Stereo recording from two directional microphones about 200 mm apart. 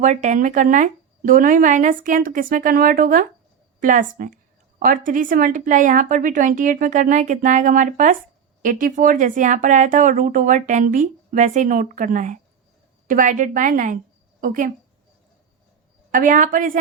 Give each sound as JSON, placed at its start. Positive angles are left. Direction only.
{"t": 0.0, "sound": "a woman's voice", "side_deg": -35}
{"t": 16.1, "sound": "a woman's voice", "side_deg": -40}